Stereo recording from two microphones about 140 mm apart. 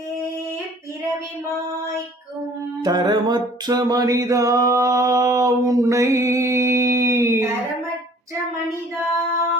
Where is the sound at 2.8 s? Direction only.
30° right (ahead or behind).